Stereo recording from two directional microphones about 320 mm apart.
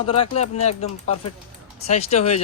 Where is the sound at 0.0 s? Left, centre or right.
Centre.